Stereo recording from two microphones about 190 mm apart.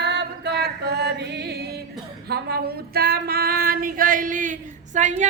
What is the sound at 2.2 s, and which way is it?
Female singing, 55° right (ahead or behind).